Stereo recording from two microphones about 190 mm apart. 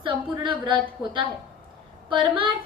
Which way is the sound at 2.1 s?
25° right (ahead or behind).